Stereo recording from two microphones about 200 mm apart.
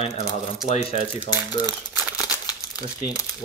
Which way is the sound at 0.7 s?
35° left (ahead or behind).